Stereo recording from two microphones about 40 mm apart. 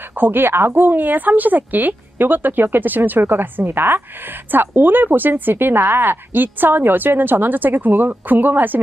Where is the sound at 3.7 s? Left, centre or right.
Right.